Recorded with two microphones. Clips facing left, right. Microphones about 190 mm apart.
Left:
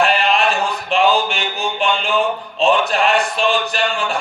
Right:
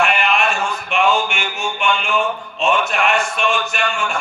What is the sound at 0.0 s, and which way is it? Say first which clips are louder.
A man's voice: left 2 dB; 35° left (ahead or behind).